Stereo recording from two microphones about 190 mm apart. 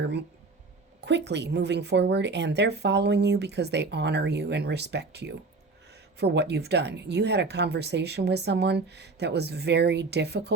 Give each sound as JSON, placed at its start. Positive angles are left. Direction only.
{"t": 0.0, "sound": "speech", "side_deg": -65}